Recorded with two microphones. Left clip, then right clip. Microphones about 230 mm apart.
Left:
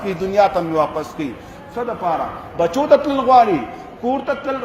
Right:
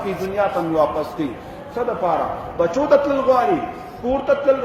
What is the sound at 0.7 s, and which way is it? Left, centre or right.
A man's voice, left.